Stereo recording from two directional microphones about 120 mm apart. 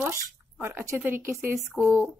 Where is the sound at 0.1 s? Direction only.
20° right (ahead or behind).